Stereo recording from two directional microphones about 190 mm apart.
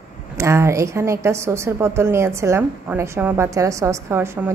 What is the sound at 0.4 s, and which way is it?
A woman's voice, 15° right (ahead or behind).